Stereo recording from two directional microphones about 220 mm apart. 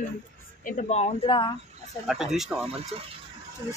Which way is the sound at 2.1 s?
Centre (ahead or behind).